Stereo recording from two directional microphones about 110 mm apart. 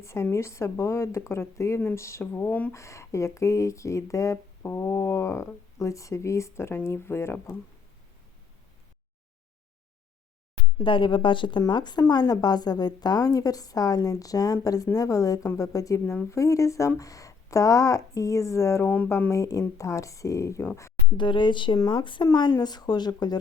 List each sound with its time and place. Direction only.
0.0 s speech: 25° left (ahead or behind)
10.8 s a woman's voice: 50° left (ahead or behind); by 20.9 s 25° left (ahead or behind)
21.2 s a woman's voice: 45° left (ahead or behind)